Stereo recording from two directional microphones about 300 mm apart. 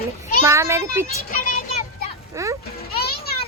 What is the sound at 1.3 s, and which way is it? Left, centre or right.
Speech, left.